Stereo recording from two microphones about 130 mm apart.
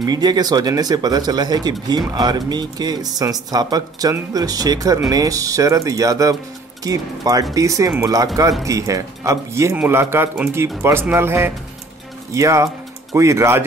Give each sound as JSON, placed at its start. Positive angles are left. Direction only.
{"t": 0.0, "sound": "a man's voice", "side_deg": -30}